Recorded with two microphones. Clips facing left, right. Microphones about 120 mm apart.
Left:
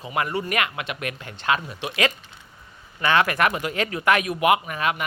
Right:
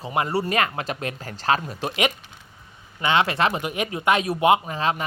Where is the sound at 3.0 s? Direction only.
20° right (ahead or behind).